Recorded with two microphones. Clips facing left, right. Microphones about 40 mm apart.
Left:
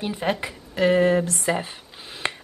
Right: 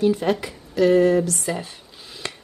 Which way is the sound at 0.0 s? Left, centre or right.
Left.